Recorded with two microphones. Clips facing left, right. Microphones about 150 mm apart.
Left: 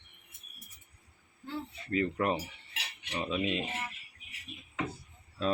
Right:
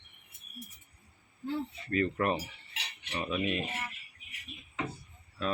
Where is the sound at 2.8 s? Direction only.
15° left (ahead or behind).